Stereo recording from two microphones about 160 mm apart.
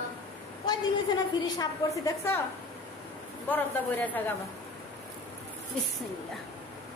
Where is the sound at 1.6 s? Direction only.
15° left (ahead or behind).